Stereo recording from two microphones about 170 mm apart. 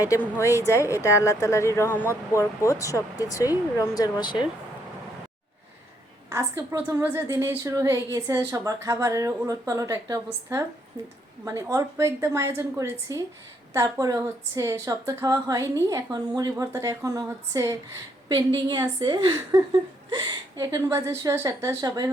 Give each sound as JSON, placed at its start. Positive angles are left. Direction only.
{"t": 0.0, "sound": "speech", "side_deg": 15}
{"t": 6.3, "sound": "a woman's voice", "side_deg": -15}